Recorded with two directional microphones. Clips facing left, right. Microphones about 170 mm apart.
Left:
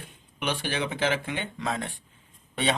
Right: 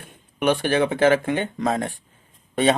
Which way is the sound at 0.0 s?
50° right (ahead or behind).